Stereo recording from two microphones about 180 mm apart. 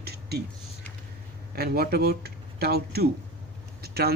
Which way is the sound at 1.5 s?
60° right (ahead or behind).